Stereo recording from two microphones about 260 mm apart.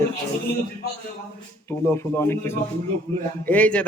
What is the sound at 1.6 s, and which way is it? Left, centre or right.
A man's voice, centre.